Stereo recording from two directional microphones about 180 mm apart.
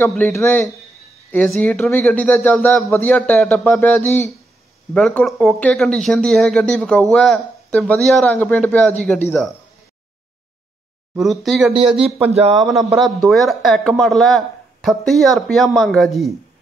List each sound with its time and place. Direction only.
0.0 s a man's voice: 10° left (ahead or behind)
11.1 s speech: centre (ahead or behind)
12.2 s speech: 35° right (ahead or behind)
12.5 s speech: centre (ahead or behind)